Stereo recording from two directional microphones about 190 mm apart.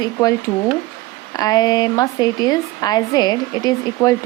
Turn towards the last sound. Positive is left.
turn(degrees=20)  # may be behind; listen again after turning